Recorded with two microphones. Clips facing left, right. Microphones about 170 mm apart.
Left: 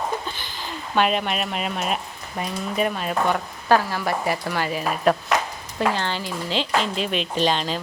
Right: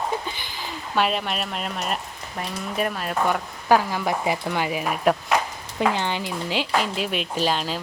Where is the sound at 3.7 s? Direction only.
15° right (ahead or behind).